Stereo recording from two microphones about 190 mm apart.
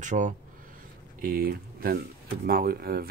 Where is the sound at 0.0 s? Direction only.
40° right (ahead or behind).